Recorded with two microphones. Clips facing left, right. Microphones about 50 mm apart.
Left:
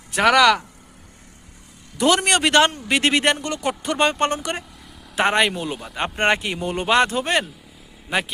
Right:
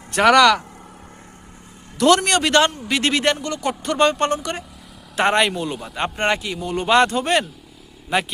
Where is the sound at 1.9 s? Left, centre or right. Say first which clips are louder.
Right 2 dB; centre.